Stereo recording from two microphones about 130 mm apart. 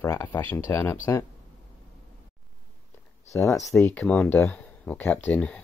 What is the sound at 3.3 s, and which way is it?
Speech, 25° left (ahead or behind).